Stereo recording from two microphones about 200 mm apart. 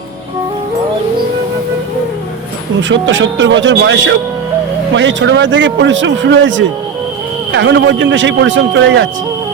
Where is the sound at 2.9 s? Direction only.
65° right (ahead or behind).